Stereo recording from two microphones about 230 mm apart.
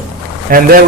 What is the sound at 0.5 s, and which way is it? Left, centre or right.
Speech, right.